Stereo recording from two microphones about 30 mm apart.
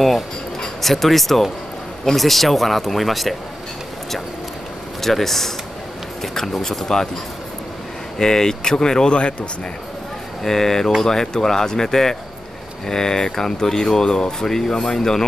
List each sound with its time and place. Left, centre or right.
0.8 s speech: centre
5.0 s speech: centre
8.2 s speech: left
10.4 s speech: centre